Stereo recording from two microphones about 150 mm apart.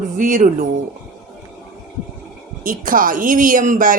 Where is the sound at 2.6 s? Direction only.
65° right (ahead or behind).